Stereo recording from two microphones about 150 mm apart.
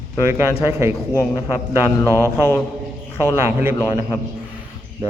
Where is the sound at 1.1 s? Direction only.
20° left (ahead or behind).